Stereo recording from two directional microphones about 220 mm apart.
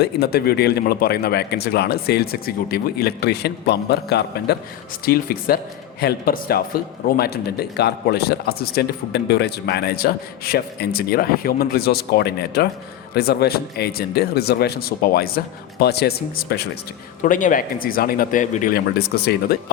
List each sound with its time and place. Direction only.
0.0 s speech: 45° left (ahead or behind)